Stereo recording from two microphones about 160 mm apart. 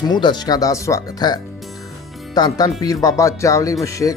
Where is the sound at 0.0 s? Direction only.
30° left (ahead or behind).